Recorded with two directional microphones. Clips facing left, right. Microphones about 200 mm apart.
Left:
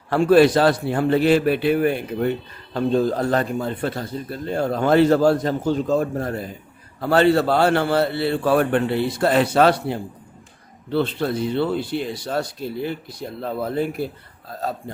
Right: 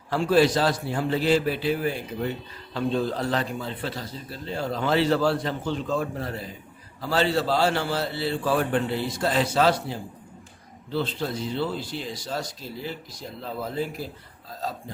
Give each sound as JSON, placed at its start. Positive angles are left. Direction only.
{"t": 0.1, "sound": "speech", "side_deg": 60}
{"t": 2.7, "sound": "a man's voice", "side_deg": 45}